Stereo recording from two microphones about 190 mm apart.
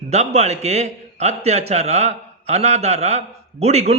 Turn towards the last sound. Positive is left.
turn(degrees=-35)  # may be behind; listen again after turning